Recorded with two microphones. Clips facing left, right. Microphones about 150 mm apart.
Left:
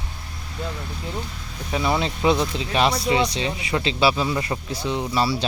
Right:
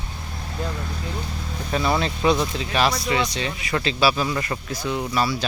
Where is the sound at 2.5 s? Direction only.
25° left (ahead or behind).